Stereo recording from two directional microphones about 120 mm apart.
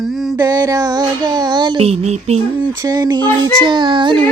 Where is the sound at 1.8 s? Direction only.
60° right (ahead or behind).